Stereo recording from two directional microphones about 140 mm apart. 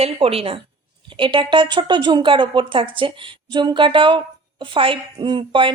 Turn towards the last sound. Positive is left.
turn(degrees=-35)  # may be behind; listen again after turning